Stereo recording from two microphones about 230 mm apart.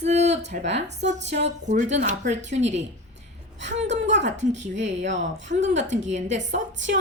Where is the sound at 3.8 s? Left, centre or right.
Right.